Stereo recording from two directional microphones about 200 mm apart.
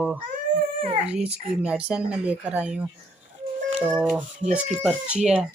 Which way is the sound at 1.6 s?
5° right (ahead or behind).